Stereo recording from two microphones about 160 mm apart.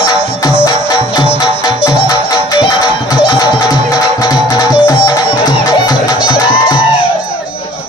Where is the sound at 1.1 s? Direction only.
25° left (ahead or behind).